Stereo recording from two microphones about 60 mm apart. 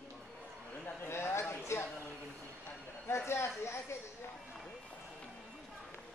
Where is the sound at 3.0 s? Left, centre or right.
Left.